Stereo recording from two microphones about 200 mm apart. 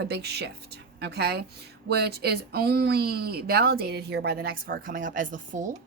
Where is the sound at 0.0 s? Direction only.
55° right (ahead or behind).